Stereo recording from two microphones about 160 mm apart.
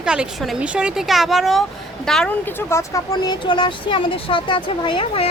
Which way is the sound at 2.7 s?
20° left (ahead or behind).